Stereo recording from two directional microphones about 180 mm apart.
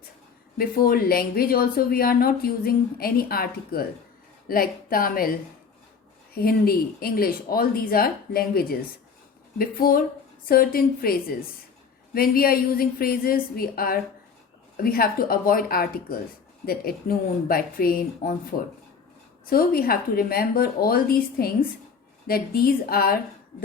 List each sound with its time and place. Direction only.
0.6 s speech: 55° left (ahead or behind)
6.3 s speech: 60° left (ahead or behind)
19.5 s speech: 55° left (ahead or behind)